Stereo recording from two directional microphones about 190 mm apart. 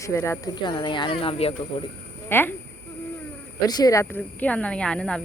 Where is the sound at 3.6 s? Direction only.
20° left (ahead or behind).